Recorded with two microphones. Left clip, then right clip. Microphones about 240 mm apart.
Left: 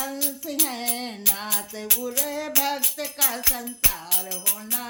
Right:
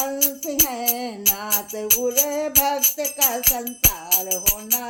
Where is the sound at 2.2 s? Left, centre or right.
Centre.